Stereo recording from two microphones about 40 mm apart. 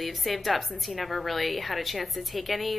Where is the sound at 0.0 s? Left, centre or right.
Centre.